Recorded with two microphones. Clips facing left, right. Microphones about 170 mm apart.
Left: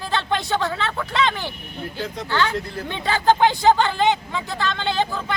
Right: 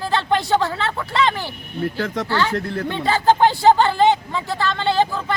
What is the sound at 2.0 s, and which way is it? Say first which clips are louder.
Speech: even; 65° right (ahead or behind).